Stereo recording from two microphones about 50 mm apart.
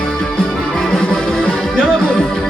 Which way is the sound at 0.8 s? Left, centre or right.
Centre.